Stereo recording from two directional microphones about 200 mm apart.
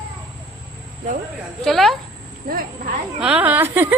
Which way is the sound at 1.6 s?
Centre (ahead or behind).